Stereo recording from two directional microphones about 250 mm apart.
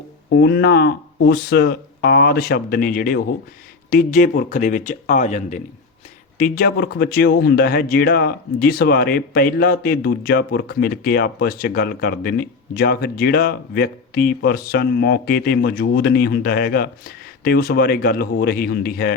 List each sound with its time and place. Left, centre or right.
0.3 s speech: left